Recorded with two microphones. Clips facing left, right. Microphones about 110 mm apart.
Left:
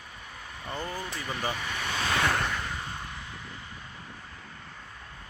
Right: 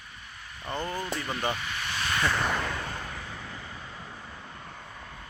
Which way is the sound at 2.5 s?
90° right.